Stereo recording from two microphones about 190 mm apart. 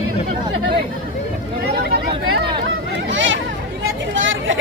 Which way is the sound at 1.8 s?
55° right (ahead or behind).